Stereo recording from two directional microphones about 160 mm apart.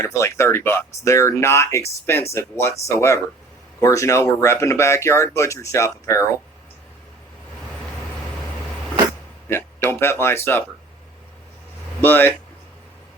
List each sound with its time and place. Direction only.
0.0 s speech: 15° left (ahead or behind)
9.5 s speech: 15° left (ahead or behind)
11.9 s speech: 15° left (ahead or behind)